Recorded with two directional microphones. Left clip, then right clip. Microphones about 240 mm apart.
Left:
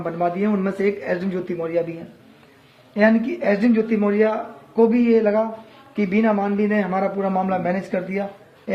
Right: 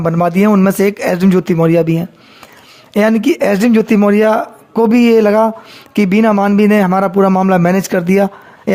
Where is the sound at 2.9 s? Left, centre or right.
Right.